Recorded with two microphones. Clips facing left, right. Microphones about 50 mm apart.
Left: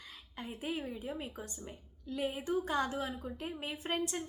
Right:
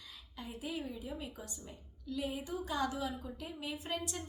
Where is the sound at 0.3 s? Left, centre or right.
Left.